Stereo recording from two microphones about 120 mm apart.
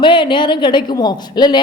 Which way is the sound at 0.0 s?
40° left (ahead or behind).